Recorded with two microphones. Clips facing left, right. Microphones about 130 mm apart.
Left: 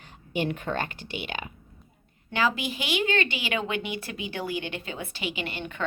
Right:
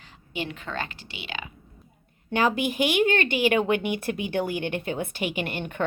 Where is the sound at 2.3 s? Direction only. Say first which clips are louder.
Right 3 dB; 50° right (ahead or behind).